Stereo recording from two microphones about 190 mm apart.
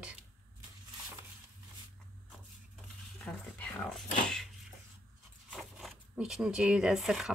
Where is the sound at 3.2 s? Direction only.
5° left (ahead or behind).